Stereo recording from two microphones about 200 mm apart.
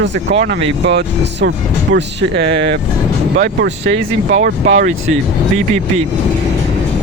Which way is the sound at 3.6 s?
60° right (ahead or behind).